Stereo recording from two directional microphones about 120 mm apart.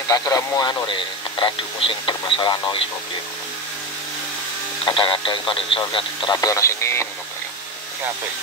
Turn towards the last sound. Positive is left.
turn(degrees=25)  # may be behind; listen again after turning